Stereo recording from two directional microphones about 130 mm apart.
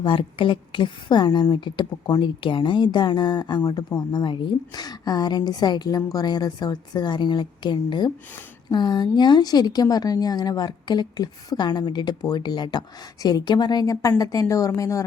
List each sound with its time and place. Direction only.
0.0 s a woman's voice: 40° left (ahead or behind); by 15.0 s 25° left (ahead or behind)